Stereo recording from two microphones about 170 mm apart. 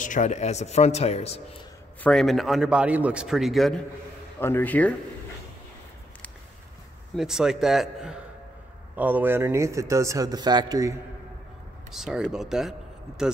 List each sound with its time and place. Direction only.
0.0 s speech: 45° left (ahead or behind)
2.0 s a man's voice: 5° left (ahead or behind)
4.4 s speech: 15° left (ahead or behind)
7.2 s a man's voice: 5° right (ahead or behind); by 11.0 s 20° right (ahead or behind)
11.9 s a man's voice: 5° right (ahead or behind)